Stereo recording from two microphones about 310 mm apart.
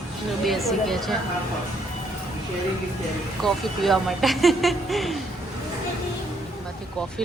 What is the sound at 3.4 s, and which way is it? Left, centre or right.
Speech, centre.